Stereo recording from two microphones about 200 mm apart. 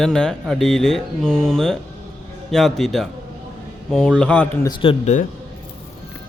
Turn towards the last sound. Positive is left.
turn(degrees=35)  # may be behind; listen again after turning